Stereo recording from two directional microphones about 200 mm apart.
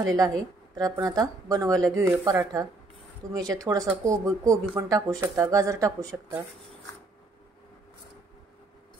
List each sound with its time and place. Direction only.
0.0 s speech: 20° right (ahead or behind)